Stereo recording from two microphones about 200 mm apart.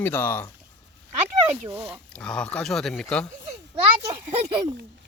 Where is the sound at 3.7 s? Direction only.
25° right (ahead or behind).